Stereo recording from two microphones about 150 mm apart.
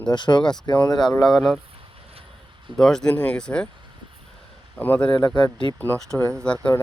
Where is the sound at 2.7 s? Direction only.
5° left (ahead or behind).